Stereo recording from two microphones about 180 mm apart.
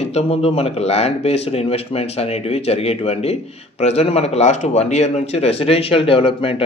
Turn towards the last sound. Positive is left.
turn(degrees=30)  # may be behind; listen again after turning